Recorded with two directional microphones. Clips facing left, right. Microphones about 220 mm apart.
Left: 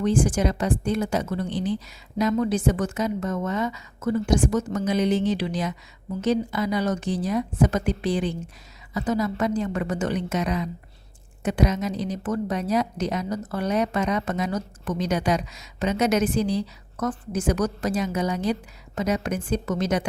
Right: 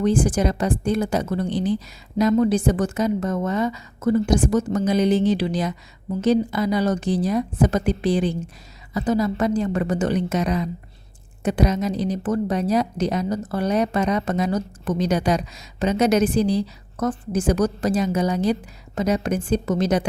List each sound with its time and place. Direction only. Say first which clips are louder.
0.0 s a woman's voice: right 2 dB; 35° right (ahead or behind)